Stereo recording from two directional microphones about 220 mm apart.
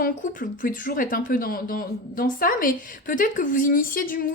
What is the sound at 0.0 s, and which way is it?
Speech, 40° left (ahead or behind).